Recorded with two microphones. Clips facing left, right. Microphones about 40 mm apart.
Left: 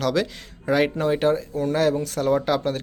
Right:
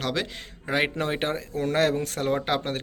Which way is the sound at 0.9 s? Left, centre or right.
Right.